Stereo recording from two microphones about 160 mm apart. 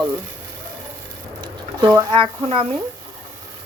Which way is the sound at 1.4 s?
25° right (ahead or behind).